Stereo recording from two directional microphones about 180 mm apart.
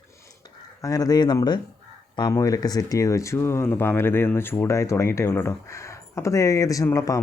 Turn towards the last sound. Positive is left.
turn(degrees=20)  # may be behind; listen again after turning